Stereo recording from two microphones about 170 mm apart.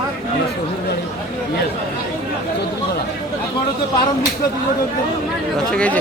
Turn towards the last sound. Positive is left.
turn(degrees=5)  # may be behind; listen again after turning